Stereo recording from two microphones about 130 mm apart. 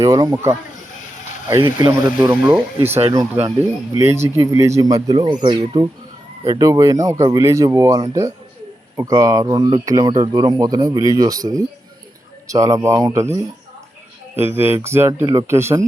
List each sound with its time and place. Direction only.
0.0 s speech: 30° right (ahead or behind)
2.2 s speech: 20° right (ahead or behind)